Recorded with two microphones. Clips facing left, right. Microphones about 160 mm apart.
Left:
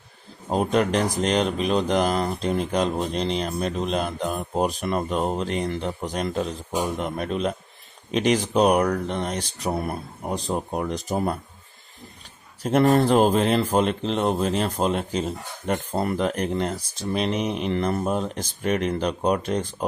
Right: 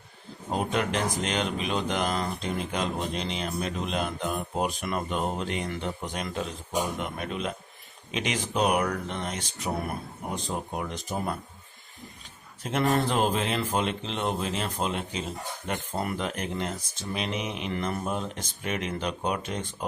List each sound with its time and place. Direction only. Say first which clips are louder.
0.5 s speech: left 6 dB; 40° left (ahead or behind)
12.6 s speech: left 7 dB; 40° left (ahead or behind)